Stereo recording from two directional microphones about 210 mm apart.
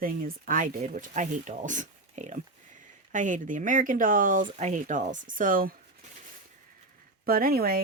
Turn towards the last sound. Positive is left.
turn(degrees=-45)  # may be behind; listen again after turning